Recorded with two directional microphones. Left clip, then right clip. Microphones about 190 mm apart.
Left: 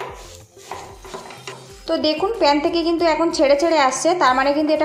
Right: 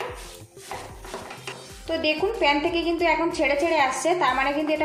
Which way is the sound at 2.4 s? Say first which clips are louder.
Left 6 dB; 25° left (ahead or behind).